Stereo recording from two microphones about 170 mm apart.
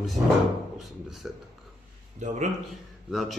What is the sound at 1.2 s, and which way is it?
Speech, 5° right (ahead or behind).